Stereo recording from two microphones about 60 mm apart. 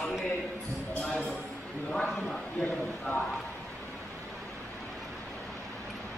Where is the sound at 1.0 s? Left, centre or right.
Left.